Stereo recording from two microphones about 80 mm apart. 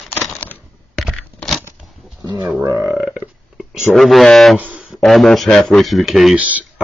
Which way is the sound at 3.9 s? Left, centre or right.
Centre.